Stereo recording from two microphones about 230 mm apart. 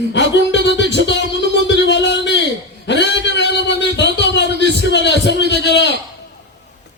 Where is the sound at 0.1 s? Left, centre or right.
Left.